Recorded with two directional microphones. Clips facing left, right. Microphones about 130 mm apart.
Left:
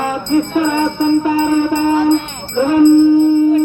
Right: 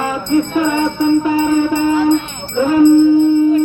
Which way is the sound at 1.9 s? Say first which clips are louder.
Left 1 dB; 35° left (ahead or behind).